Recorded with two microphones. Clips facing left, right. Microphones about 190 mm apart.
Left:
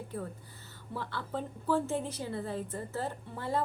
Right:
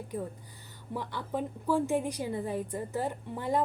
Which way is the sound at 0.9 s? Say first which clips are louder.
Right 3 dB; 15° right (ahead or behind).